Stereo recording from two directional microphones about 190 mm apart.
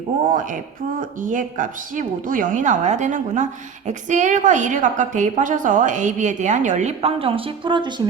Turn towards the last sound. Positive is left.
turn(degrees=-25)  # may be behind; listen again after turning